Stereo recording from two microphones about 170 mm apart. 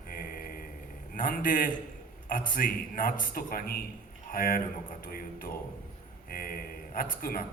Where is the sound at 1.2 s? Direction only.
55° left (ahead or behind).